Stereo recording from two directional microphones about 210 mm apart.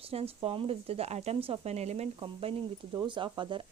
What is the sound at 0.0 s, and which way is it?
Speech, 30° right (ahead or behind).